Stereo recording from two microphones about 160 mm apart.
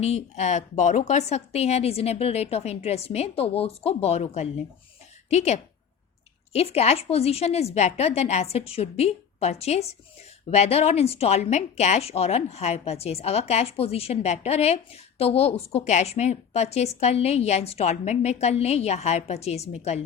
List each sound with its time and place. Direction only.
0.0 s a woman's voice: 40° left (ahead or behind)